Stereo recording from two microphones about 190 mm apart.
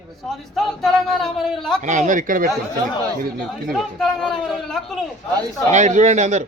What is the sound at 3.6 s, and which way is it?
A man's voice, centre (ahead or behind).